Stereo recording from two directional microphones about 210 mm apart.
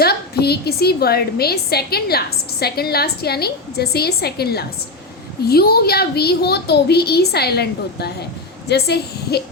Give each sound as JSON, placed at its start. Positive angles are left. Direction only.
{"t": 0.0, "sound": "a woman's voice", "side_deg": 50}